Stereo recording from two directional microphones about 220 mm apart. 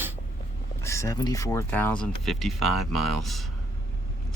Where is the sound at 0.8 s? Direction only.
15° left (ahead or behind).